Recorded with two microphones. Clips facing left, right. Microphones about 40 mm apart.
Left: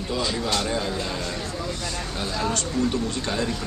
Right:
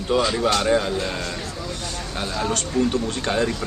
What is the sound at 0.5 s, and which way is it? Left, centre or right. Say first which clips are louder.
Speech: right 7 dB; right.